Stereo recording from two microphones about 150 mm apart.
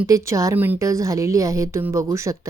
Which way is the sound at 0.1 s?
20° right (ahead or behind).